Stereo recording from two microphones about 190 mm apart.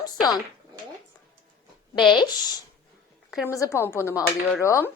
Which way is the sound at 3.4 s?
15° left (ahead or behind).